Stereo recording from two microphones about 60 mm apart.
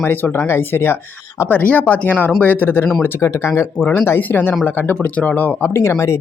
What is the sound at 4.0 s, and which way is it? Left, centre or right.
Speech, left.